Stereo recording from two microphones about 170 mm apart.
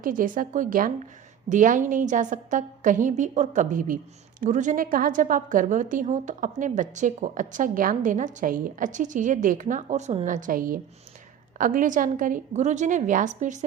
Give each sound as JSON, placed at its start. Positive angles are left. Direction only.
{"t": 0.0, "sound": "a woman's voice", "side_deg": -55}